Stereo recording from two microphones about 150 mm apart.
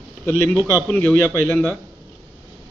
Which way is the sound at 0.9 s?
10° left (ahead or behind).